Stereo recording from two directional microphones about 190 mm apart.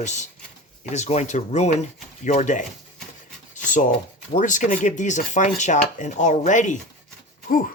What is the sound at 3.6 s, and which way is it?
Speech, 40° left (ahead or behind).